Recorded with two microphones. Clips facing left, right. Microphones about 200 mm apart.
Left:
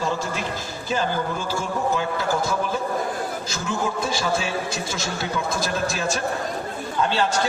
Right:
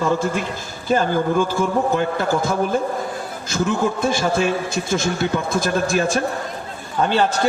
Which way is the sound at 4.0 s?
55° right (ahead or behind).